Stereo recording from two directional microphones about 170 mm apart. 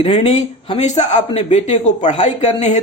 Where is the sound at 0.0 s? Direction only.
35° left (ahead or behind).